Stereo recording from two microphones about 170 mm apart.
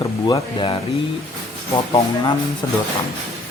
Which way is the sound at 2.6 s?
20° left (ahead or behind).